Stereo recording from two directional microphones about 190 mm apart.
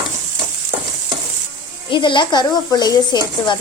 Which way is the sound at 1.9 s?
25° left (ahead or behind).